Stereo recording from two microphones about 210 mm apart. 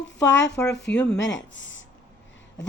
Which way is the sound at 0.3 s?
60° left (ahead or behind).